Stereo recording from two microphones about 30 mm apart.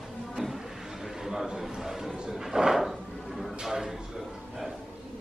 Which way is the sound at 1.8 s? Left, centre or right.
Centre.